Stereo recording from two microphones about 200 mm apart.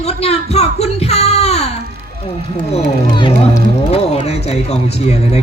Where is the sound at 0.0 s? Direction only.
30° left (ahead or behind).